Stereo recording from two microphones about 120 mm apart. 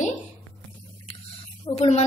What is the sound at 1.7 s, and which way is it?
Speech, 65° left (ahead or behind).